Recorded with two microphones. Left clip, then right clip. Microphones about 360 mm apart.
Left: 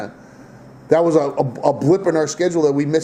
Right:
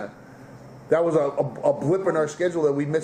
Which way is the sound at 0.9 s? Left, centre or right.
Left.